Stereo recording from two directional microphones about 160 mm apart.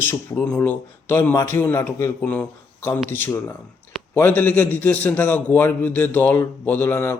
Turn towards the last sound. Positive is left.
turn(degrees=15)  # may be behind; listen again after turning